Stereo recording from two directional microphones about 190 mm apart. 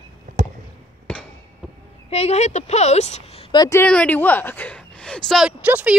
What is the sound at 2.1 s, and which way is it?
A woman's voice, 35° left (ahead or behind).